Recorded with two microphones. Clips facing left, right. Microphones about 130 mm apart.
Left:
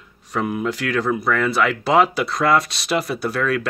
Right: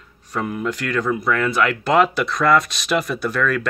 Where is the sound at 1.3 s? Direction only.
5° left (ahead or behind).